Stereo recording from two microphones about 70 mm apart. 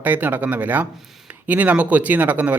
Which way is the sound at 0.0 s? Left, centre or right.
Right.